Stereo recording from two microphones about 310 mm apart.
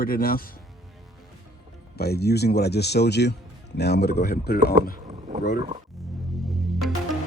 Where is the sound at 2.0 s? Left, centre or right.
Left.